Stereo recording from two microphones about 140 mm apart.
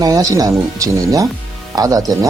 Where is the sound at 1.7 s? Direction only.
25° right (ahead or behind).